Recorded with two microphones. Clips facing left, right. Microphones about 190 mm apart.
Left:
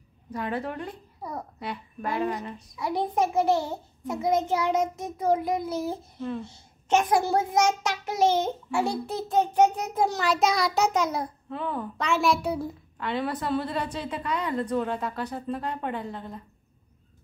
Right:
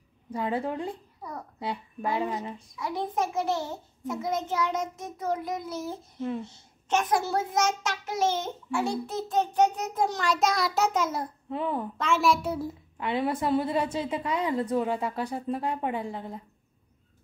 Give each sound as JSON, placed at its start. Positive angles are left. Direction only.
{"t": 0.3, "sound": "a woman's voice", "side_deg": -25}
{"t": 2.0, "sound": "a woman's voice", "side_deg": -15}
{"t": 2.8, "sound": "a child's voice", "side_deg": 15}
{"t": 11.4, "sound": "a woman's voice", "side_deg": -20}
{"t": 12.0, "sound": "a child's voice", "side_deg": 0}
{"t": 12.9, "sound": "a woman's voice", "side_deg": -20}
{"t": 14.7, "sound": "a woman's voice", "side_deg": -10}